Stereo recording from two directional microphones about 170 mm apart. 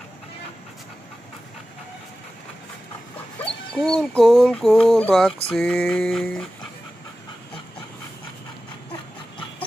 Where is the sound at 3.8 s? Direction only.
5° left (ahead or behind).